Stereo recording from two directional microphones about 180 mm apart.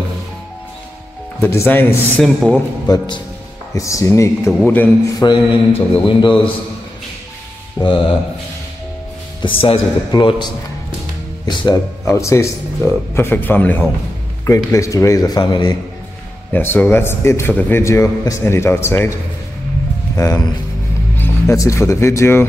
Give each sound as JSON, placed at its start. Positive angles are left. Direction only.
{"t": 1.4, "sound": "a man's voice", "side_deg": 10}
{"t": 2.9, "sound": "a man's voice", "side_deg": 20}
{"t": 7.8, "sound": "speech", "side_deg": 30}
{"t": 9.4, "sound": "a man's voice", "side_deg": 30}
{"t": 16.5, "sound": "a man's voice", "side_deg": 10}
{"t": 20.2, "sound": "speech", "side_deg": 20}